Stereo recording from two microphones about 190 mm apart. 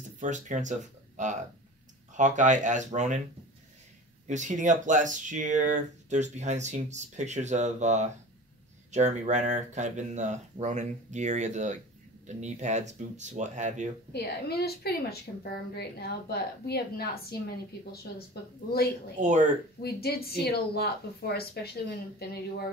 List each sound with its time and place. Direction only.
0.2 s speech: 40° right (ahead or behind)
4.3 s speech: 40° right (ahead or behind)
14.1 s speech: 55° left (ahead or behind)
19.1 s speech: 40° right (ahead or behind)
19.8 s speech: 55° left (ahead or behind)